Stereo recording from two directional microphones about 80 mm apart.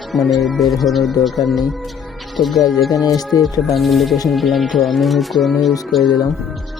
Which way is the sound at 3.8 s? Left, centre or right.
Centre.